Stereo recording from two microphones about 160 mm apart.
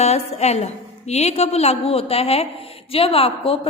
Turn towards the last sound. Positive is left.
turn(degrees=35)  # may be behind; listen again after turning